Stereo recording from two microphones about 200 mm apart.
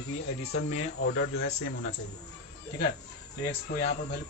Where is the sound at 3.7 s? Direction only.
50° left (ahead or behind).